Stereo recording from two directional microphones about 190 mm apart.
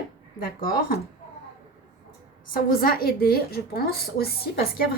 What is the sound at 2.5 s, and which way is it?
Speech, 50° left (ahead or behind).